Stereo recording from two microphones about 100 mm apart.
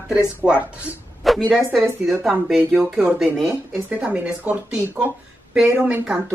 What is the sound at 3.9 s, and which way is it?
A woman's voice, 10° right (ahead or behind).